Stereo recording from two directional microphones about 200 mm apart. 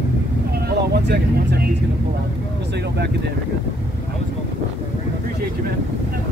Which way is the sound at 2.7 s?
55° right (ahead or behind).